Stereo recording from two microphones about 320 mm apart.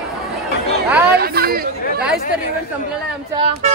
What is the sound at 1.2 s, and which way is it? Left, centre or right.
Chatter, right.